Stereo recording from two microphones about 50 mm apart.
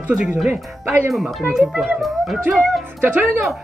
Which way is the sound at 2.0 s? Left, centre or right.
Centre.